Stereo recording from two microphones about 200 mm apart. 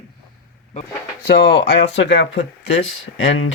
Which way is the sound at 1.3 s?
60° left (ahead or behind).